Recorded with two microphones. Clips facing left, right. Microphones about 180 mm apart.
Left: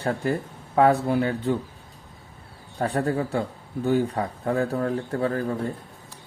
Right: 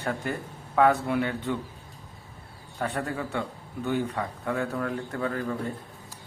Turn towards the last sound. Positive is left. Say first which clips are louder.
# left 5 dB
turn(degrees=35)  # may be behind; listen again after turning